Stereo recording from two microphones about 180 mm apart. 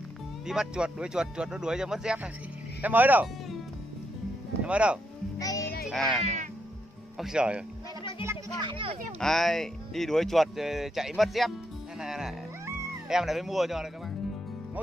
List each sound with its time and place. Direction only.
0.5 s speech: 5° right (ahead or behind)
4.6 s speech: 5° right (ahead or behind)
5.4 s music: 20° left (ahead or behind)
5.9 s speech: centre (ahead or behind)
8.3 s a child's voice: 25° right (ahead or behind)
9.2 s speech: centre (ahead or behind)